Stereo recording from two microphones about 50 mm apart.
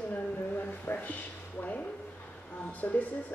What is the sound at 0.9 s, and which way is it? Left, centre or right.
Speech, left.